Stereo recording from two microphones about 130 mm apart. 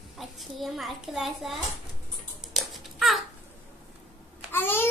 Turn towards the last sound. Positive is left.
turn(degrees=15)  # may be behind; listen again after turning